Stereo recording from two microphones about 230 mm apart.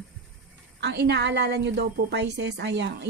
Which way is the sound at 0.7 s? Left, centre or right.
Right.